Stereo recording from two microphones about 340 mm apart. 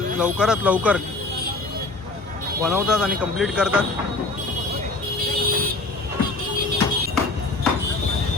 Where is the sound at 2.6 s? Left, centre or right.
Centre.